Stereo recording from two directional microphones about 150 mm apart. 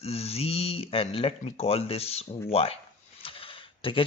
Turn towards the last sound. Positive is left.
turn(degrees=35)  # may be behind; listen again after turning